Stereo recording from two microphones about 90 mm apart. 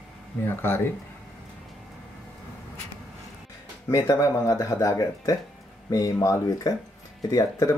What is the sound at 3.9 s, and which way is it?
Speech, 40° left (ahead or behind).